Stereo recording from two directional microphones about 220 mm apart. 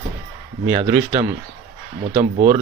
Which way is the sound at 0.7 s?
10° right (ahead or behind).